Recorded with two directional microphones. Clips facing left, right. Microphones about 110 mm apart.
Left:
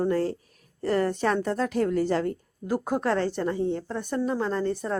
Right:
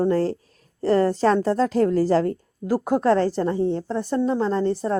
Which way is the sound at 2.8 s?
20° right (ahead or behind).